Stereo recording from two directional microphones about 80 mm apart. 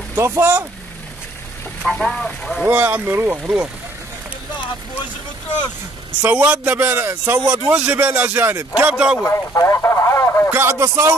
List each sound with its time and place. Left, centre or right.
0.1 s speech: right
1.9 s speech: centre
2.6 s speech: right
6.2 s speech: centre
9.2 s speech: left
10.5 s speech: right